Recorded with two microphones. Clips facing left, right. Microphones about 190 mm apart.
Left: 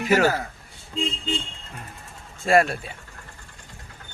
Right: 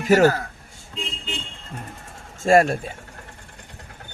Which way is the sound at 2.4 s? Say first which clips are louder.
Right 3 dB; 40° right (ahead or behind).